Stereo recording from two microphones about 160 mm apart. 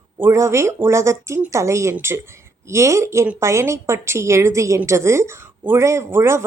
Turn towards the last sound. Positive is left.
turn(degrees=-15)  # may be behind; listen again after turning